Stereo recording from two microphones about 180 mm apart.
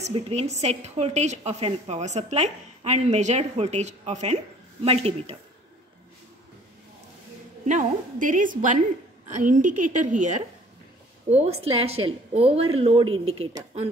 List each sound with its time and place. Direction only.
0.0 s a woman's voice: 35° right (ahead or behind)
7.6 s a woman's voice: 45° right (ahead or behind)